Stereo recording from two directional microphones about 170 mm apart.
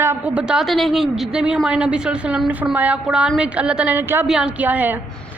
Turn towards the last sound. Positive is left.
turn(degrees=-10)  # may be behind; listen again after turning